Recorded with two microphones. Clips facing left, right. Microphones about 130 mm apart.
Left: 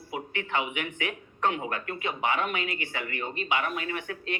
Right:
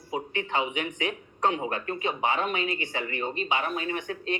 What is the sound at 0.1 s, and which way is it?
Speech, 30° right (ahead or behind).